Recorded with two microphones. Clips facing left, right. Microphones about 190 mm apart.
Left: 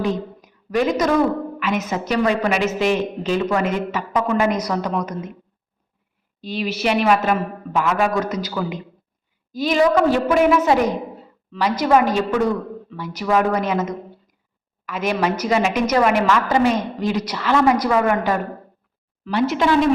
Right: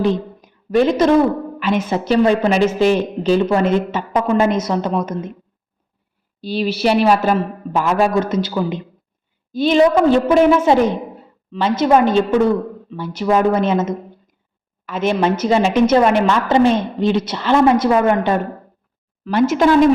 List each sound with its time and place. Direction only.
0.0 s a sound: 30° right (ahead or behind)
1.5 s speech: 30° right (ahead or behind)
6.4 s a man's voice: 35° right (ahead or behind)
19.2 s speech: 45° right (ahead or behind)